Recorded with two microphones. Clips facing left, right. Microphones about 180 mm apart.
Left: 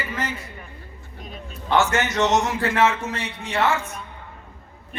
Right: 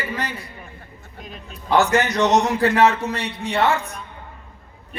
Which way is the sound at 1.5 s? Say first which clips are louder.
Right 3 dB; 35° right (ahead or behind).